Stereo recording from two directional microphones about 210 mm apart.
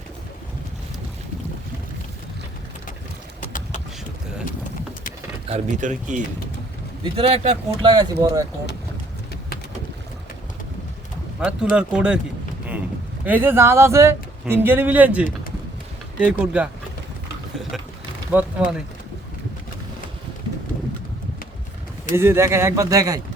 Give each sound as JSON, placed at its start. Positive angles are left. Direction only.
{"t": 5.5, "sound": "speech", "side_deg": -35}
{"t": 11.3, "sound": "speech", "side_deg": -5}
{"t": 13.2, "sound": "speech", "side_deg": -10}
{"t": 16.4, "sound": "speech", "side_deg": -5}
{"t": 18.3, "sound": "speech", "side_deg": -10}
{"t": 22.1, "sound": "speech", "side_deg": -10}